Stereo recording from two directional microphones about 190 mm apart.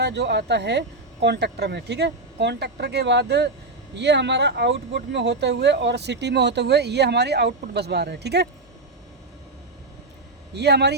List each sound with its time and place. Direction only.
0.0 s speech: 65° right (ahead or behind)
10.5 s speech: 60° right (ahead or behind)